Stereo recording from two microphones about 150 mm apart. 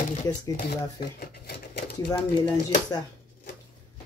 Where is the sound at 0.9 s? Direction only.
90° left.